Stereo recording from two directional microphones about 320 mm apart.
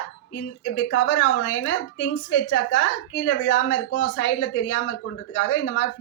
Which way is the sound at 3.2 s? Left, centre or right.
Left.